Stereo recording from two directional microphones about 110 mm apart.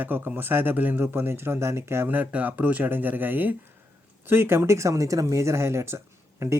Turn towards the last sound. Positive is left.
turn(degrees=-25)  # may be behind; listen again after turning